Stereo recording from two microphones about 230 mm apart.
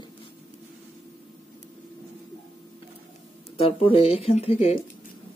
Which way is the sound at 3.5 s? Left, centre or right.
Left.